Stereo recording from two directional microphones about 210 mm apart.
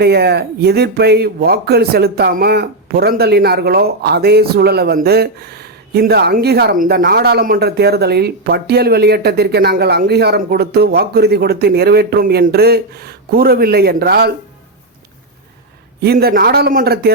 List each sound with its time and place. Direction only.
0.0 s speech: 50° right (ahead or behind)
16.0 s speech: 50° right (ahead or behind)